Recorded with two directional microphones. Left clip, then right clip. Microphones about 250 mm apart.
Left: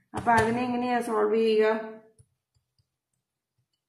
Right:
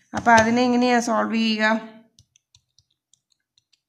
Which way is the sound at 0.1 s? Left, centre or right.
Right.